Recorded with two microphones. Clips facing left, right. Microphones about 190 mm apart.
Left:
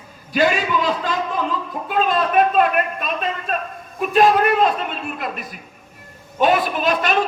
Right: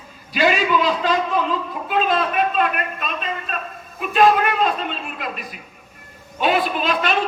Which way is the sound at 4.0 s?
45° left (ahead or behind).